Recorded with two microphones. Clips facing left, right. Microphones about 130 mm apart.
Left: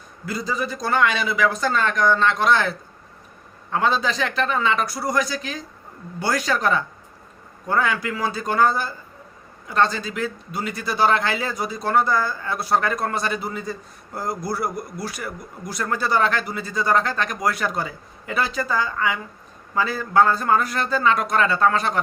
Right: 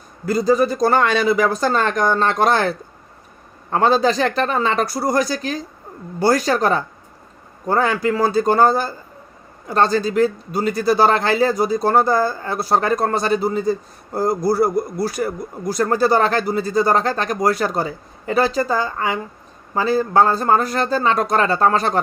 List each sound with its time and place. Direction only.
0.3 s a man's voice: 45° right (ahead or behind)